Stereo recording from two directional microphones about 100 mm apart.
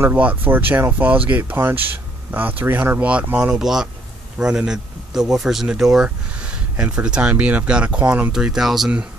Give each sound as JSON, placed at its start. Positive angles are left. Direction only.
{"t": 0.0, "sound": "speech", "side_deg": -15}